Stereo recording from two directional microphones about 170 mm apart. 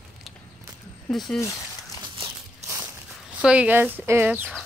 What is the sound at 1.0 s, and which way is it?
Speech, centre (ahead or behind).